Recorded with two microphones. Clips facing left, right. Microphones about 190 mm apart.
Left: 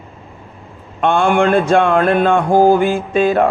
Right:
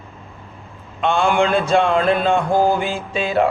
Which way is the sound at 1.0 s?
50° left (ahead or behind).